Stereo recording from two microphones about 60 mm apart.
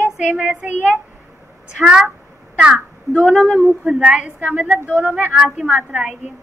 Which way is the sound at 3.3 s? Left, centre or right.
Centre.